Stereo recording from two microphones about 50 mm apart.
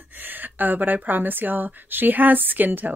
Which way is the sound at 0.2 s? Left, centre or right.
Right.